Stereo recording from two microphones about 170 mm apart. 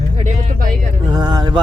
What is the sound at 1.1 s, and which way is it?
Speech, 25° right (ahead or behind).